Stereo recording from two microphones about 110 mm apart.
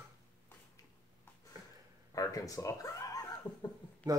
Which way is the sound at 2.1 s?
30° left (ahead or behind).